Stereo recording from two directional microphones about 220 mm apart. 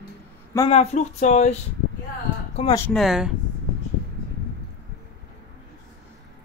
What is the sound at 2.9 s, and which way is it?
Speech, centre (ahead or behind).